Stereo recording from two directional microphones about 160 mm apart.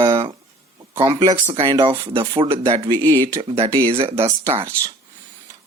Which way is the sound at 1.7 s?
25° right (ahead or behind).